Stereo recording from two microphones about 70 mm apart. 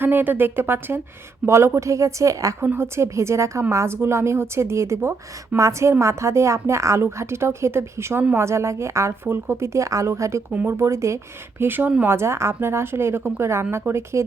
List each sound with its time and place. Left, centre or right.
0.0 s a woman's voice: right
2.6 s a woman's voice: right
11.6 s a woman's voice: right